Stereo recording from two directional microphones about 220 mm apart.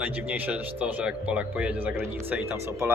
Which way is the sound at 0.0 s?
10° right (ahead or behind).